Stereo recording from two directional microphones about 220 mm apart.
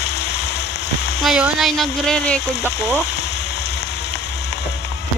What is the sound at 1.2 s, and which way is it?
A woman's voice, centre (ahead or behind).